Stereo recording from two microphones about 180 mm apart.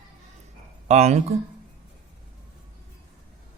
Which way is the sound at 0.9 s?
35° right (ahead or behind).